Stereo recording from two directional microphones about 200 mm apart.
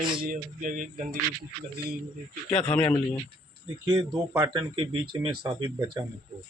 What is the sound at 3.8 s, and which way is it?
A man's voice, 15° right (ahead or behind).